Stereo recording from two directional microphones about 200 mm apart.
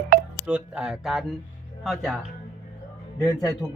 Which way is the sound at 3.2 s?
15° left (ahead or behind).